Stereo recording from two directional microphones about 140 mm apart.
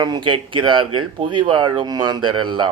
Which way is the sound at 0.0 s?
35° right (ahead or behind).